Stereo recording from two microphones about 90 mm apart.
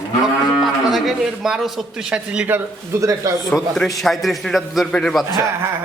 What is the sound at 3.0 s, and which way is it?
Speech, 35° right (ahead or behind).